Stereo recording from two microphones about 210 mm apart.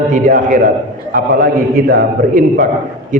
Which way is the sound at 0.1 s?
40° right (ahead or behind).